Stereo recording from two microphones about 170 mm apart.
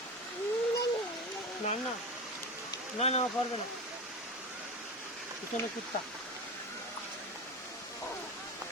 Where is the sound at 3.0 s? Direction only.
40° left (ahead or behind).